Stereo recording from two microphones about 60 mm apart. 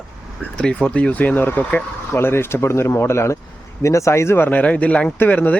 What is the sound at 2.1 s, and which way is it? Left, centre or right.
Speech, left.